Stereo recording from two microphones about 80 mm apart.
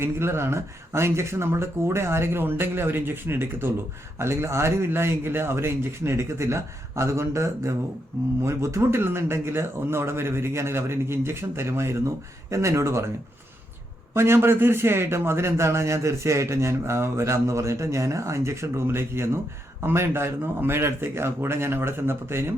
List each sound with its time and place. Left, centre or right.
0.0 s a man's voice: right
14.1 s a man's voice: right